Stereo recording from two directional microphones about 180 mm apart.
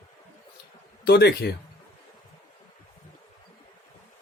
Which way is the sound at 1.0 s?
65° left (ahead or behind).